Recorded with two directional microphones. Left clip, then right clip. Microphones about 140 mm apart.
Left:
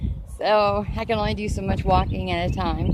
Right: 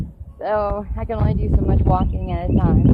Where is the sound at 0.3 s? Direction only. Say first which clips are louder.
Left 2 dB; 35° left (ahead or behind).